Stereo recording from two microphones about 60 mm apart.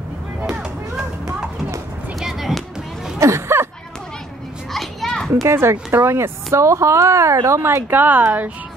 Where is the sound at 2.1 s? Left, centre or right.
Centre.